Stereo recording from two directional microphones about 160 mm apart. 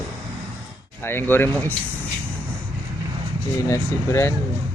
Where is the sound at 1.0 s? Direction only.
15° left (ahead or behind).